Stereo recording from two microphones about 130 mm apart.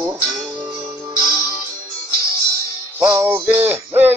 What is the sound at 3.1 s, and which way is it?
Music, 15° right (ahead or behind).